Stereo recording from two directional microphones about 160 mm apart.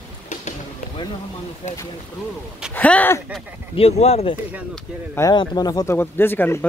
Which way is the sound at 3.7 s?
40° left (ahead or behind).